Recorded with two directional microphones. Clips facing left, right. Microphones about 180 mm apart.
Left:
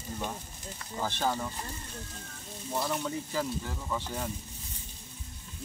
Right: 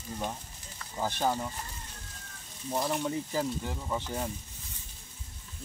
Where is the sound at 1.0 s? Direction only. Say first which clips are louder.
Right 1 dB; 15° right (ahead or behind).